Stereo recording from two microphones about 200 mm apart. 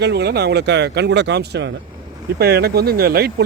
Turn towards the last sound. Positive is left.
turn(degrees=-50)  # may be behind; listen again after turning